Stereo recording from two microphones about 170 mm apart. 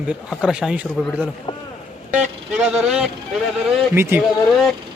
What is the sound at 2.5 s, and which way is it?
Speech, 5° right (ahead or behind).